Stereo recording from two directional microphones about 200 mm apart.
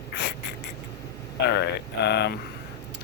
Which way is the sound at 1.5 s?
55° left (ahead or behind).